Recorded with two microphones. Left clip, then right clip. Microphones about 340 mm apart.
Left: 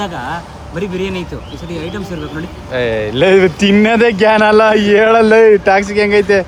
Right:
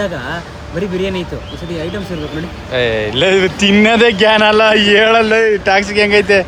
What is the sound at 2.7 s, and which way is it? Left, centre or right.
Speech, centre.